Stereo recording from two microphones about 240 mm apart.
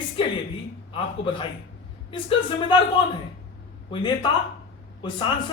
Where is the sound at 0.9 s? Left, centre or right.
Left.